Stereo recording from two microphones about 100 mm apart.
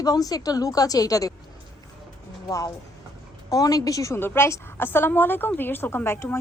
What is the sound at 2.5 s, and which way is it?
A woman's voice, 35° left (ahead or behind).